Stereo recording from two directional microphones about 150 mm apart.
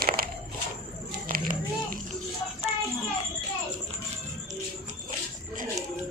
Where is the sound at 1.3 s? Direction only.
70° right (ahead or behind).